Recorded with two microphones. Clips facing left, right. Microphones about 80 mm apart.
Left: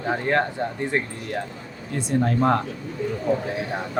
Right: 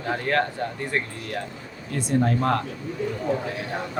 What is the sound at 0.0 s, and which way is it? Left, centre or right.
A man's voice, centre.